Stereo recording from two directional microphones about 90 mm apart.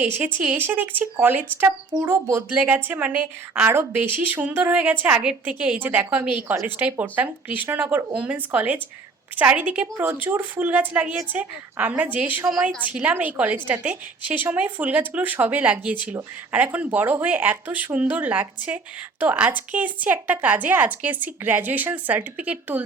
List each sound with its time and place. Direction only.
0.0 s speech: 20° right (ahead or behind)
1.9 s speech: 50° right (ahead or behind)
2.5 s speech: 20° right (ahead or behind)